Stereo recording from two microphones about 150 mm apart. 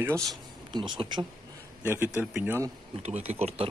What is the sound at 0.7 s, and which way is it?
Speech, 30° right (ahead or behind).